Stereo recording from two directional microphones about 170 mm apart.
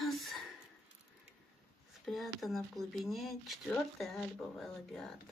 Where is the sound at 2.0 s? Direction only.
Centre (ahead or behind).